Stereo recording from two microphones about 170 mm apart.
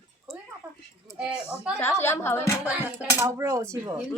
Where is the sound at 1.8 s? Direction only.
15° left (ahead or behind).